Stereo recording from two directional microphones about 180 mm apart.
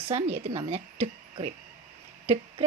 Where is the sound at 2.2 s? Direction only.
35° right (ahead or behind).